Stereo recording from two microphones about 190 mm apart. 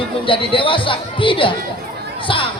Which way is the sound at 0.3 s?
25° left (ahead or behind).